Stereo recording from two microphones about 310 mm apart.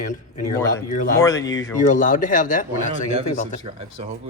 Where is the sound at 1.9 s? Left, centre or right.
Left.